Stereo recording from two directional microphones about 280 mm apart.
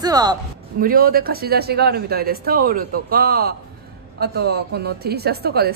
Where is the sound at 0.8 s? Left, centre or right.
Right.